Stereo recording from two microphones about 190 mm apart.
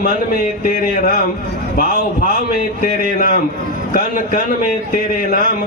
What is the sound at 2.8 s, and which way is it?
Speech, 45° left (ahead or behind).